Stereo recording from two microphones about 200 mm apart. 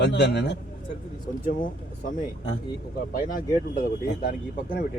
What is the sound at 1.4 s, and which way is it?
Speech, 45° left (ahead or behind).